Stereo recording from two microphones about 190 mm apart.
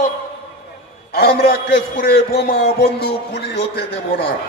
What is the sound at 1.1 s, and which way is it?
A man's voice, 55° left (ahead or behind).